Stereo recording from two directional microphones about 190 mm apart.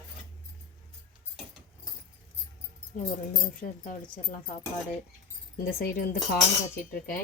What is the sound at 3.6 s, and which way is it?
Speech, 45° left (ahead or behind).